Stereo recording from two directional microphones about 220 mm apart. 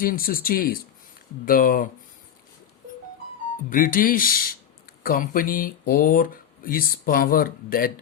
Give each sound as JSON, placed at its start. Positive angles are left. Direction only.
{"t": 0.0, "sound": "speech", "side_deg": 40}
{"t": 3.7, "sound": "speech", "side_deg": 40}